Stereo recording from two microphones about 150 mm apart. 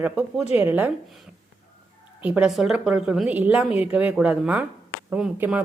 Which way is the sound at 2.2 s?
10° right (ahead or behind).